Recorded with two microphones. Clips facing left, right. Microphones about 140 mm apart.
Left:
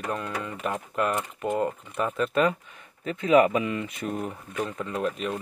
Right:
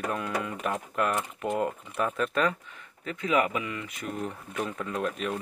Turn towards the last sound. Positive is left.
turn(degrees=0)  # may be behind; listen again after turning